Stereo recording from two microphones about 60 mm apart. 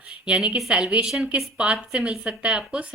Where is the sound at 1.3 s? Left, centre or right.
Centre.